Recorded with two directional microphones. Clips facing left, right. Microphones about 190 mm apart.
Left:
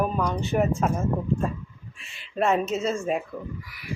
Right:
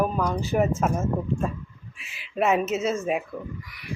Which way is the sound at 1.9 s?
5° right (ahead or behind).